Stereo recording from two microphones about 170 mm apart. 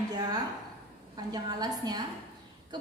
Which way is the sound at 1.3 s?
25° right (ahead or behind).